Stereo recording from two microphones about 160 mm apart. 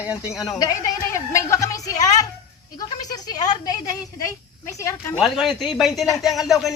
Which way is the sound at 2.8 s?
25° left (ahead or behind).